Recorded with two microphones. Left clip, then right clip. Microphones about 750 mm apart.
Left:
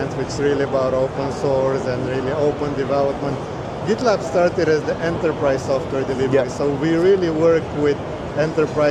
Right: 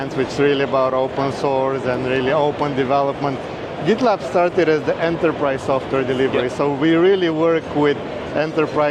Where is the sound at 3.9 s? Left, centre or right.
Right.